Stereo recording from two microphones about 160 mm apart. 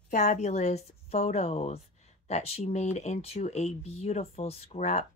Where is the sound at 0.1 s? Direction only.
50° left (ahead or behind).